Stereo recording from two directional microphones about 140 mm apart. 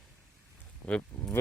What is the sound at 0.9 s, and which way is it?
Speech, 10° left (ahead or behind).